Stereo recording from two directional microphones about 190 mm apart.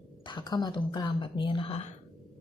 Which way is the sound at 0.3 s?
20° left (ahead or behind).